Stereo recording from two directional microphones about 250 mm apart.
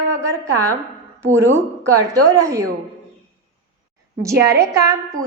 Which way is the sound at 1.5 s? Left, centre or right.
Centre.